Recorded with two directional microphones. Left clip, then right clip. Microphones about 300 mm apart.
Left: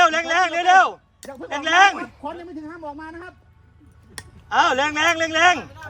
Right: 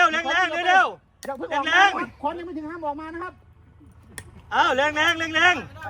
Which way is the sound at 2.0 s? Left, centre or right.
Centre.